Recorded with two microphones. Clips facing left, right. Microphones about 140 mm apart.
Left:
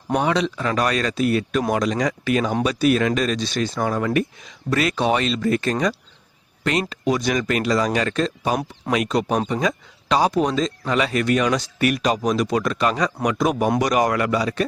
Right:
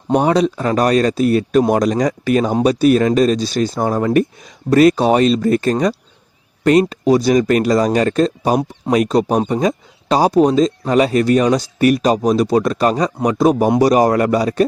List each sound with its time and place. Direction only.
0.1 s speech: 40° right (ahead or behind)